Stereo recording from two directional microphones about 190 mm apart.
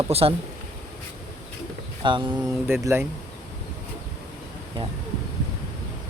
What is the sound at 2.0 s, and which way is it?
Speech, 25° right (ahead or behind).